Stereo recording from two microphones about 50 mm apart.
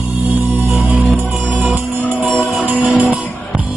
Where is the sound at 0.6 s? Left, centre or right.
Right.